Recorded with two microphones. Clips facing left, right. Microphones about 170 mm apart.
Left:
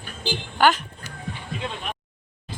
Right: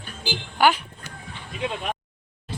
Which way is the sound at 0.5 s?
10° right (ahead or behind).